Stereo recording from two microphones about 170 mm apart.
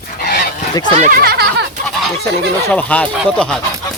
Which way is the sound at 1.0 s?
60° right (ahead or behind).